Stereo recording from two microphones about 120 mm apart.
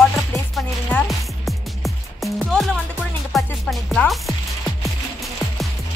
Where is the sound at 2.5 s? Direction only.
Centre (ahead or behind).